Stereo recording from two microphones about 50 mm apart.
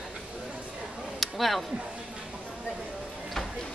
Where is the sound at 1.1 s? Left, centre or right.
Centre.